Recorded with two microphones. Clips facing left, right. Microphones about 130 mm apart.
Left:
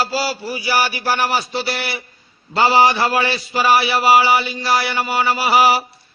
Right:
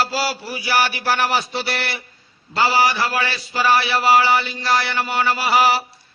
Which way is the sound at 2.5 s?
20° left (ahead or behind).